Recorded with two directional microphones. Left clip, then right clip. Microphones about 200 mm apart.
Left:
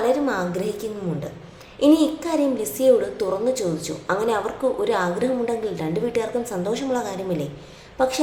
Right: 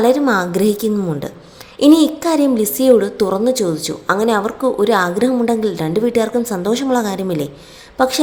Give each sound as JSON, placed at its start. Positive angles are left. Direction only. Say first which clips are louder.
{"t": 0.0, "sound": "a woman's voice", "louder": "right 7 dB", "side_deg": -40}